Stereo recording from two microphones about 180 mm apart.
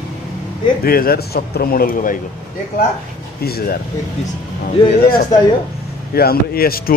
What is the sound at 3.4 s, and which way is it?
Speech, 55° left (ahead or behind).